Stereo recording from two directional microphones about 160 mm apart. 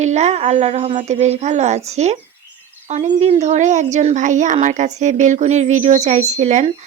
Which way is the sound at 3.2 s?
45° right (ahead or behind).